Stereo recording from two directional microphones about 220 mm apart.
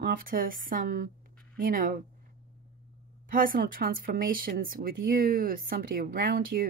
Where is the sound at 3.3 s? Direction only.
40° right (ahead or behind).